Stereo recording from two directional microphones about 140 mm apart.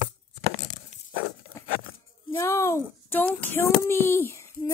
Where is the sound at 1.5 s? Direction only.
20° left (ahead or behind).